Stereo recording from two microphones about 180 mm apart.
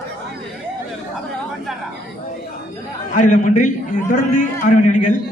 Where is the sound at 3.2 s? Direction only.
45° left (ahead or behind).